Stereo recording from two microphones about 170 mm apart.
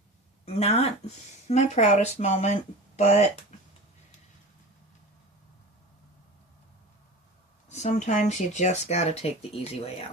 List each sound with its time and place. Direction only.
0.4 s speech: 40° left (ahead or behind)
7.7 s speech: 45° left (ahead or behind)